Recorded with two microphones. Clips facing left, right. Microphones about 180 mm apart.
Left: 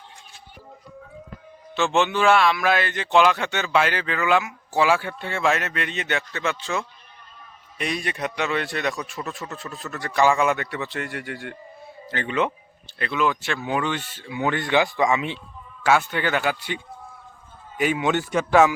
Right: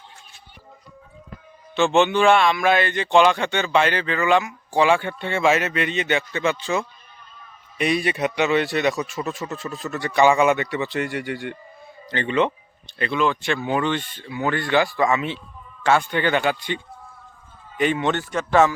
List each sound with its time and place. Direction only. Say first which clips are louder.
1.7 s speech: right 4 dB; centre (ahead or behind)